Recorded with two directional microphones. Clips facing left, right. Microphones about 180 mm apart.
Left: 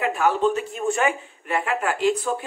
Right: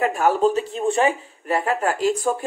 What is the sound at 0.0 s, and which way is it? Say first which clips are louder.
Speech: right 2 dB; 40° right (ahead or behind).